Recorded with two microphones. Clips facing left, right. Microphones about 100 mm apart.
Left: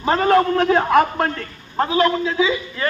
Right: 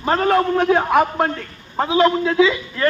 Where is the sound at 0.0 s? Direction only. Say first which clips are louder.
Left 1 dB; centre (ahead or behind).